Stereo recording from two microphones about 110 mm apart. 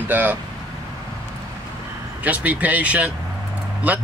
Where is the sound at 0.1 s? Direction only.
15° right (ahead or behind).